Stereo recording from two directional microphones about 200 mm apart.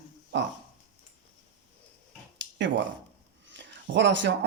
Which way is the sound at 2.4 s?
65° right (ahead or behind).